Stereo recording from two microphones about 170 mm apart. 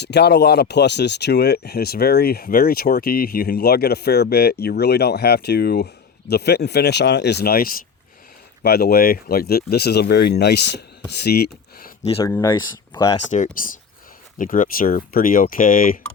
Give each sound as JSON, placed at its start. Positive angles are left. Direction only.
{"t": 0.0, "sound": "speech", "side_deg": 80}
{"t": 12.2, "sound": "speech", "side_deg": 15}
{"t": 13.1, "sound": "speech", "side_deg": 45}